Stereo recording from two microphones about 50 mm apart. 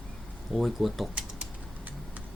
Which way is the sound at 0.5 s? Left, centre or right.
Centre.